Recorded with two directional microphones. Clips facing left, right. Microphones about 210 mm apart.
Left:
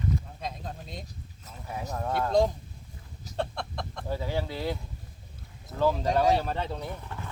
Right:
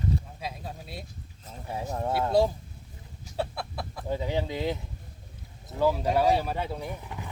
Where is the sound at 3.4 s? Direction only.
5° right (ahead or behind).